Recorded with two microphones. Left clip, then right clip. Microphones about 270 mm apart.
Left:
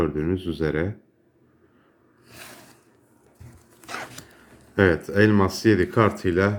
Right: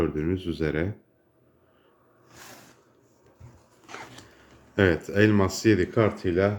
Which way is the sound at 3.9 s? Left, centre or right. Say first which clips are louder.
Left 7 dB; left.